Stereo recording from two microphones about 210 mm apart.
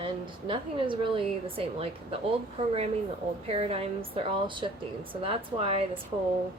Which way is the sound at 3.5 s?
30° right (ahead or behind).